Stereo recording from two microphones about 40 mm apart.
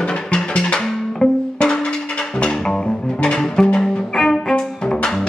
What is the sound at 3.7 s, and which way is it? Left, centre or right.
Cello, centre.